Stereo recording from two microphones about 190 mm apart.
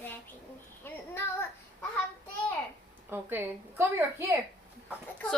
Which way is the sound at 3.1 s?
10° right (ahead or behind).